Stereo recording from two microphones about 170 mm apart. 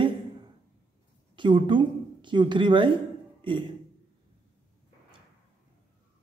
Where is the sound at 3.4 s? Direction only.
30° right (ahead or behind).